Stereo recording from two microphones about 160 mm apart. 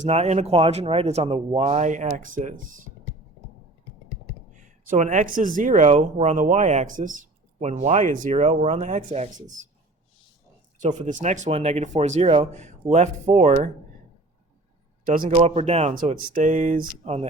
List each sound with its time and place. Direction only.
0.0 s speech: 45° right (ahead or behind)
4.5 s speech: 50° right (ahead or behind)
10.8 s speech: 45° right (ahead or behind)
15.2 s speech: 40° right (ahead or behind)